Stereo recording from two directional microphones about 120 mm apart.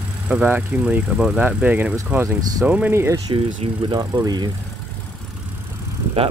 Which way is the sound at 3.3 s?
45° right (ahead or behind).